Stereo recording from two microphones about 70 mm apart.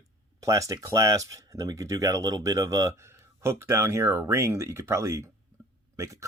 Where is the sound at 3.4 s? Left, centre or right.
Right.